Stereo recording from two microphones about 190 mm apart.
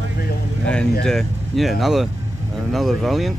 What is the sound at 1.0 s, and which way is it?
Speech, 5° left (ahead or behind).